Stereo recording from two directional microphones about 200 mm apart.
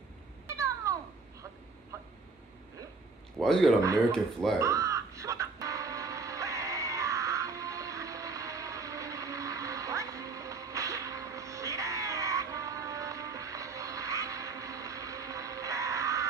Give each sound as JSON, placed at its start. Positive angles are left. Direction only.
{"t": 0.8, "sound": "babbling", "side_deg": -15}
{"t": 3.3, "sound": "speech", "side_deg": 0}
{"t": 4.6, "sound": "music", "side_deg": -15}